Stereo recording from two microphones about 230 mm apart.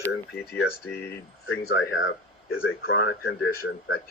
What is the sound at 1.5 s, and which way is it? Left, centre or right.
Speech, left.